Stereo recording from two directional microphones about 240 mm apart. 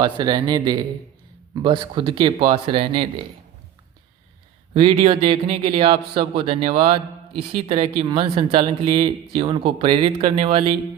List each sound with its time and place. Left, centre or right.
0.0 s a man's voice: centre
4.7 s a man's voice: right